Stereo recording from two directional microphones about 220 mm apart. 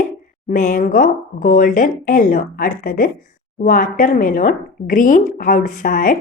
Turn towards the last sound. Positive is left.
turn(degrees=35)  # may be behind; listen again after turning